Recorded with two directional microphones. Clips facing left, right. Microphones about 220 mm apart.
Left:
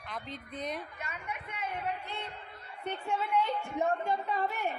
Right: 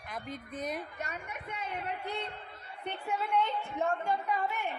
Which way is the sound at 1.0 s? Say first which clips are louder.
Right 1 dB; 45° right (ahead or behind).